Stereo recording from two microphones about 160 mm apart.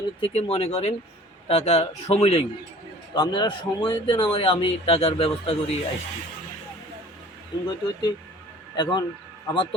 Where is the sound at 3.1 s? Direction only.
30° left (ahead or behind).